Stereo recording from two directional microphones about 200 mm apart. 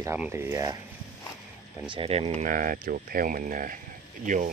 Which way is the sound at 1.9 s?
30° right (ahead or behind).